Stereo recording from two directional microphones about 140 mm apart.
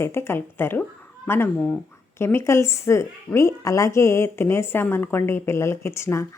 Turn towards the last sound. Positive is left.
turn(degrees=20)  # may be behind; listen again after turning